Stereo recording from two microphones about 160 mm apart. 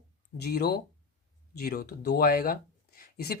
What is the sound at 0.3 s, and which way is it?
Speech, 85° left.